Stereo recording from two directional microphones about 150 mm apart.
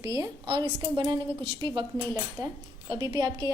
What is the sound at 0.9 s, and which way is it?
A woman's voice, 30° right (ahead or behind).